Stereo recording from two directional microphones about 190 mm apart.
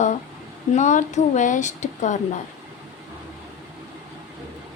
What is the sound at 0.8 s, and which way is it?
Speech, 40° left (ahead or behind).